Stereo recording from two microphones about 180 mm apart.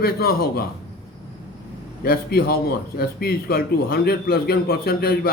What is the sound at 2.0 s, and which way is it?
A man's voice, 55° left (ahead or behind).